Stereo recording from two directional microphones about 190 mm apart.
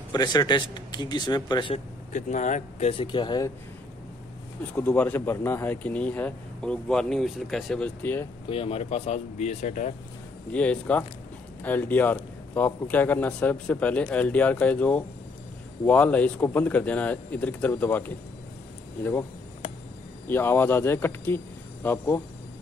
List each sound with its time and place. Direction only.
0.1 s speech: 20° left (ahead or behind)
2.1 s speech: 40° left (ahead or behind); by 3.5 s 20° left (ahead or behind)
4.7 s speech: 10° left (ahead or behind)
8.5 s speech: 30° left (ahead or behind)
10.5 s speech: 5° left (ahead or behind)
20.2 s speech: 10° left (ahead or behind)